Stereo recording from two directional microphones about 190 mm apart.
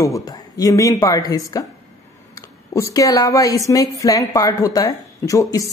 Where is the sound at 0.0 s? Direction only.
20° left (ahead or behind).